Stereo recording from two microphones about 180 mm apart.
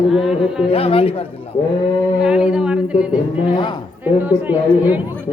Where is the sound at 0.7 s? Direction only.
30° left (ahead or behind).